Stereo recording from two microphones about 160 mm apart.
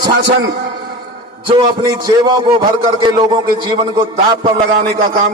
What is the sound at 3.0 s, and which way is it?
Speech, 30° right (ahead or behind).